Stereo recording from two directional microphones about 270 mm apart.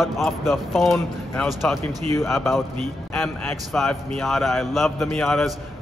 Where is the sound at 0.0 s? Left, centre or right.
Centre.